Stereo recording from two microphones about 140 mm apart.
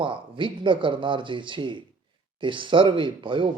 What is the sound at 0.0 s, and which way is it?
Speech, 35° right (ahead or behind).